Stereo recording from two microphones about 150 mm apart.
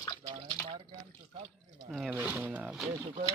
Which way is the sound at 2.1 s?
10° right (ahead or behind).